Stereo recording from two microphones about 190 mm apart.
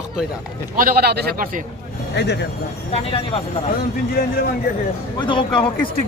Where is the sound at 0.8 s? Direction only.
50° right (ahead or behind).